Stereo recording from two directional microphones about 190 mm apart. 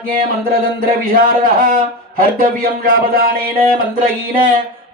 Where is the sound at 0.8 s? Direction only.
50° right (ahead or behind).